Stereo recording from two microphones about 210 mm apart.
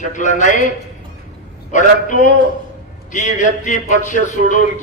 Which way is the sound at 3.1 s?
35° left (ahead or behind).